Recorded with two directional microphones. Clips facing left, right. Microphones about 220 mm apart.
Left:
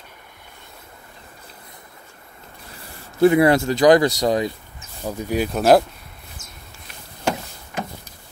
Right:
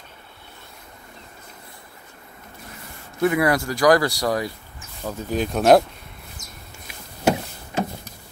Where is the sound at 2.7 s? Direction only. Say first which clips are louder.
Even; 30° left (ahead or behind); by 5.5 s 10° left (ahead or behind).